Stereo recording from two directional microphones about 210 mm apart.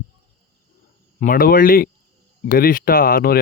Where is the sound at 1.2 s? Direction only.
40° left (ahead or behind).